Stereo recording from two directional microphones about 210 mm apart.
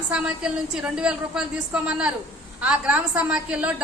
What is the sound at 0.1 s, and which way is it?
A woman's voice, 5° right (ahead or behind).